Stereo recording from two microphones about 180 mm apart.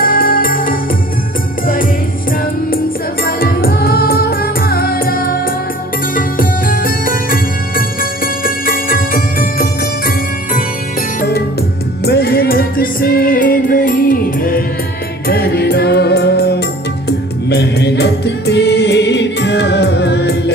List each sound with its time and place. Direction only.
0.0 s music: 50° left (ahead or behind)
3.3 s music: 55° left (ahead or behind)